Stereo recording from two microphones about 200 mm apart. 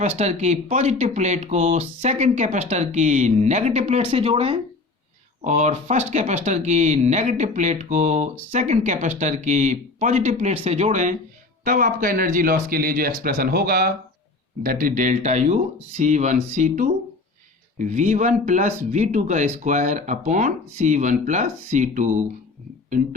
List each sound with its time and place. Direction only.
0.2 s speech: 35° right (ahead or behind)